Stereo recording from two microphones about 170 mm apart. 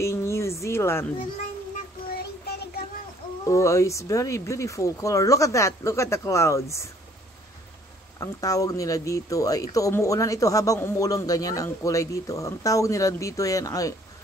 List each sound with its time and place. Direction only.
0.0 s a sound: 15° left (ahead or behind)
2.1 s child singing: 65° left (ahead or behind)
3.4 s speech: 20° left (ahead or behind)
8.2 s speech: 20° left (ahead or behind)